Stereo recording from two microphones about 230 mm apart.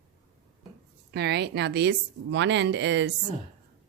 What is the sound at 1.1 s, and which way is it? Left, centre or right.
Speech, right.